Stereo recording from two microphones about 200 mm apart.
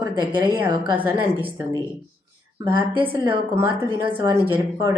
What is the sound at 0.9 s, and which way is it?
Speech, 10° right (ahead or behind).